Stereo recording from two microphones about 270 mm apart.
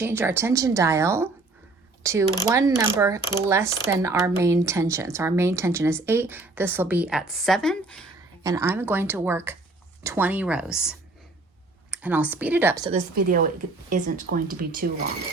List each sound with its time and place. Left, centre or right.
0.0 s speech: centre
8.4 s speech: centre
12.9 s speech: right